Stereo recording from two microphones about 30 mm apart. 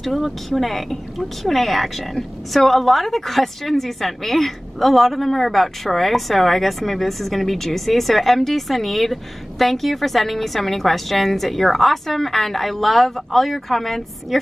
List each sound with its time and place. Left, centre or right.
0.0 s a woman's voice: centre